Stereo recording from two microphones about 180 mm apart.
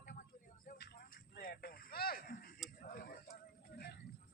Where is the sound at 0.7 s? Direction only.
55° left (ahead or behind).